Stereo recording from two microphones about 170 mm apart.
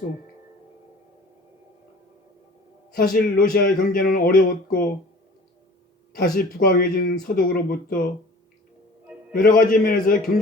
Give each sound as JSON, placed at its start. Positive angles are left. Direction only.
{"t": 2.9, "sound": "speech", "side_deg": 55}
{"t": 6.1, "sound": "speech", "side_deg": 60}
{"t": 9.3, "sound": "speech", "side_deg": 55}